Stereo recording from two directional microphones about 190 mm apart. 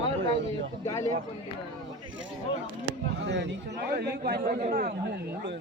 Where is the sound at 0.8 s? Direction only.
15° left (ahead or behind).